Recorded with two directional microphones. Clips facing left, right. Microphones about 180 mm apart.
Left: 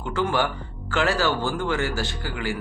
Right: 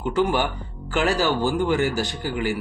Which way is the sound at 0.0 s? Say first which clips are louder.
Right 3 dB; 15° right (ahead or behind).